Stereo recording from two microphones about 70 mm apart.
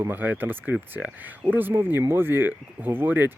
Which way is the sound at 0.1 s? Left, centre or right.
Right.